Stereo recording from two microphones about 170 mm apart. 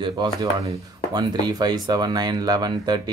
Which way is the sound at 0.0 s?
25° right (ahead or behind).